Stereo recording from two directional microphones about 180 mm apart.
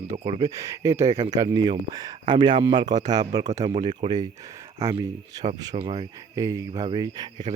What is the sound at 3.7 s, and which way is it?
Speech, 35° right (ahead or behind).